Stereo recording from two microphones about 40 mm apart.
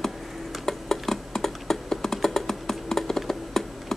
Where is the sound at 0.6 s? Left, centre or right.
Centre.